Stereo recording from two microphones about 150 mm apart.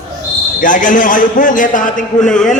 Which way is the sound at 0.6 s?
60° left (ahead or behind).